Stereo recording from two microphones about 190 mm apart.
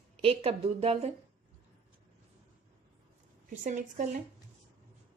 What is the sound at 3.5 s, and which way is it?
Speech, 40° right (ahead or behind).